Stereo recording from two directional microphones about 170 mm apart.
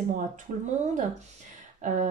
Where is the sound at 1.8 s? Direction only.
45° right (ahead or behind).